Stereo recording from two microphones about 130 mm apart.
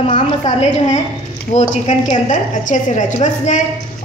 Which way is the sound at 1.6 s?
65° left (ahead or behind).